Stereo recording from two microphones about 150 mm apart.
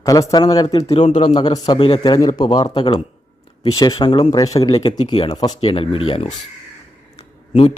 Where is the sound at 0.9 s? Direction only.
45° left (ahead or behind).